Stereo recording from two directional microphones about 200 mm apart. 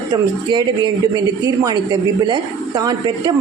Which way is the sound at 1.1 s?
20° right (ahead or behind).